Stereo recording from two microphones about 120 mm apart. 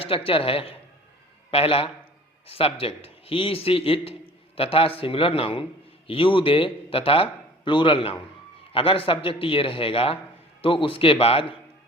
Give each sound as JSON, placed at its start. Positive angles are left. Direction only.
{"t": 0.0, "sound": "a man's voice", "side_deg": 50}